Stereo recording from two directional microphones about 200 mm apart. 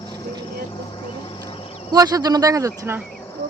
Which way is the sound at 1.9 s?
20° right (ahead or behind).